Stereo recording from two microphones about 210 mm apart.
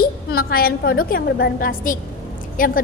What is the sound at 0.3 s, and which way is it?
A woman's voice, 45° left (ahead or behind).